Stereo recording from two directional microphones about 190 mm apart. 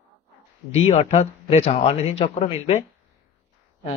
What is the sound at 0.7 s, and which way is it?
A man's voice, 35° left (ahead or behind).